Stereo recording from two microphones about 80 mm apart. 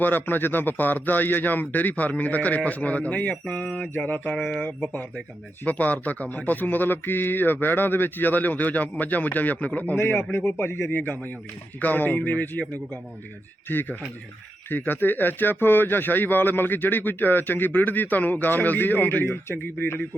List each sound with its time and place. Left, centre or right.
0.0 s a man's voice: left
4.4 s speech: centre
5.6 s a man's voice: centre